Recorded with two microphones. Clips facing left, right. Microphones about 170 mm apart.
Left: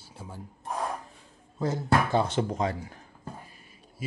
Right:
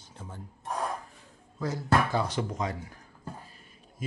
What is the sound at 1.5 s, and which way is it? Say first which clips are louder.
Speech: left 1 dB; 25° left (ahead or behind).